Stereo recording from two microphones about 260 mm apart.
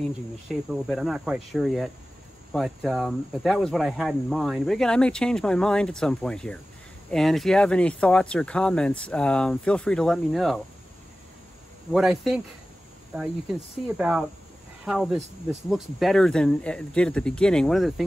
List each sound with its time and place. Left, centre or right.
0.5 s speech: centre
11.9 s speech: centre